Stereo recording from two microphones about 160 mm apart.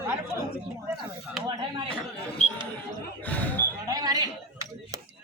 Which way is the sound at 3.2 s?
10° left (ahead or behind).